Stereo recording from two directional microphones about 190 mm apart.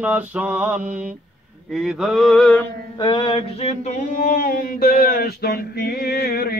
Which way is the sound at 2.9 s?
25° left (ahead or behind).